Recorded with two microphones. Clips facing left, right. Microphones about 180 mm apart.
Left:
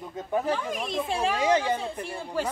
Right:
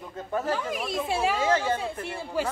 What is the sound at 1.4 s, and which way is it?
Speech, 15° left (ahead or behind).